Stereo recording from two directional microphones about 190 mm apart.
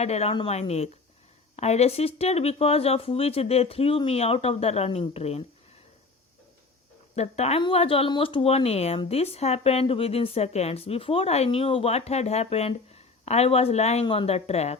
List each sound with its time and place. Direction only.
0.0 s speech: 35° left (ahead or behind)
7.2 s speech: 35° left (ahead or behind)